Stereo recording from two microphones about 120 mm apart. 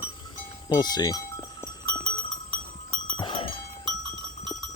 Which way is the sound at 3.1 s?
45° left (ahead or behind).